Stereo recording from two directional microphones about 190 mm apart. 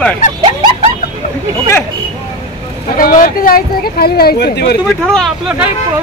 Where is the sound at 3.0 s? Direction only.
50° left (ahead or behind).